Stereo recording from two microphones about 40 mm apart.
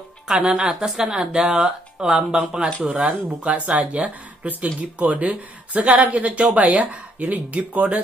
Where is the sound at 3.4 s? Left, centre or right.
Right.